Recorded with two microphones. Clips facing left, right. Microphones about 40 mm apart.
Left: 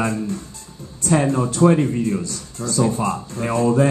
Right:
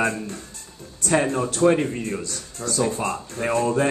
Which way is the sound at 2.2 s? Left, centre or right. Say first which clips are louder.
Left 3 dB; right.